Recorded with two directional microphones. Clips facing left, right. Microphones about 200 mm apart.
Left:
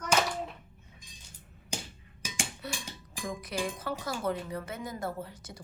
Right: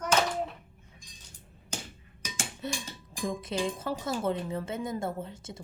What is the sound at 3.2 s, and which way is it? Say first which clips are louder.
Speech: right 3 dB; 25° right (ahead or behind).